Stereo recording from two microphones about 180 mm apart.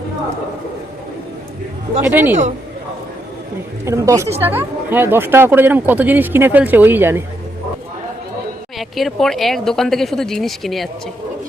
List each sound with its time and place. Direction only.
2.0 s speech: 10° right (ahead or behind)
3.8 s speech: 15° right (ahead or behind)
8.8 s speech: centre (ahead or behind)